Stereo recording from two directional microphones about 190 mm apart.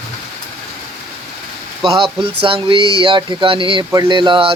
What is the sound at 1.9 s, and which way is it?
Speech, 30° right (ahead or behind).